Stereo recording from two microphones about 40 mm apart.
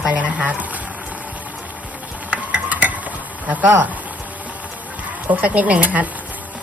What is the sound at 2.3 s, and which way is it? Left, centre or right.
Stir, right.